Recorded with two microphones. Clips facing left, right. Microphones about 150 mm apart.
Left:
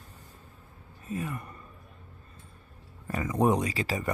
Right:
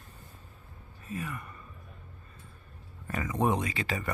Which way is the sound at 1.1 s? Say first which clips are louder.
Left 3 dB; 30° left (ahead or behind).